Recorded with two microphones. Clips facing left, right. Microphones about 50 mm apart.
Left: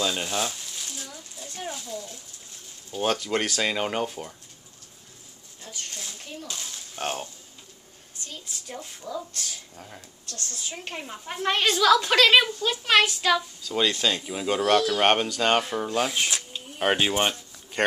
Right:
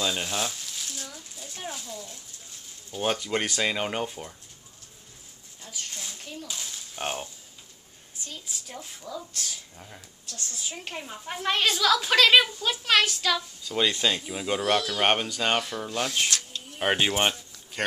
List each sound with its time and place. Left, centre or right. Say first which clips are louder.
0.0 s a sound: left 2 dB; centre
2.9 s a woman's voice: left 2 dB; centre
5.6 s a sound: left 1 dB; centre
7.0 s a woman's voice: left 2 dB; centre
10.2 s a woman's voice: left 1 dB; centre
10.8 s a woman's voice: left 1 dB; centre
13.7 s a woman's voice: left 1 dB; centre
15.6 s speech: left 5 dB; left
15.9 s a sound: left 1 dB; centre
16.8 s a woman's voice: left 1 dB; centre